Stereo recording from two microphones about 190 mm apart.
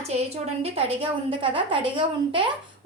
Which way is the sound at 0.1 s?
35° right (ahead or behind).